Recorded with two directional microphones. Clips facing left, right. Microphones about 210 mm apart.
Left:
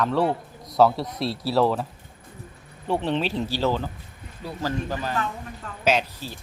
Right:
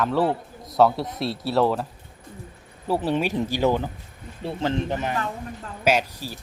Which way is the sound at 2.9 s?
5° right (ahead or behind).